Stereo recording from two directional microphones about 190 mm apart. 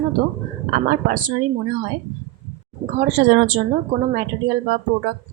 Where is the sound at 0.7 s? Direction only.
50° right (ahead or behind).